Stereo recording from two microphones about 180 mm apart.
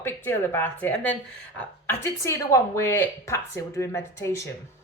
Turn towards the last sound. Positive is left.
turn(degrees=15)  # may be behind; listen again after turning